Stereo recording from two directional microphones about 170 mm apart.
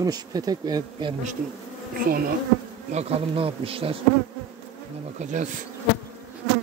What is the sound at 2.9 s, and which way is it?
Speech, 35° right (ahead or behind).